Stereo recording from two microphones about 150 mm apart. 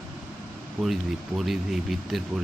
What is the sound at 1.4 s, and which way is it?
Speech, centre (ahead or behind).